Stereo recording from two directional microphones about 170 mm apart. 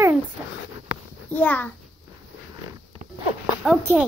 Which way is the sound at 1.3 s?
10° left (ahead or behind).